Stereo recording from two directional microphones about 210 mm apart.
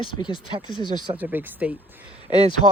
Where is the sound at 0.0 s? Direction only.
20° left (ahead or behind).